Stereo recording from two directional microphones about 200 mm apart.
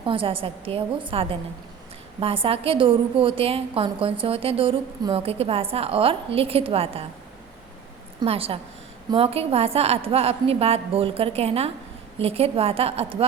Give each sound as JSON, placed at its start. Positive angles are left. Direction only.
{"t": 0.0, "sound": "a woman's voice", "side_deg": -25}
{"t": 8.2, "sound": "a woman's voice", "side_deg": -30}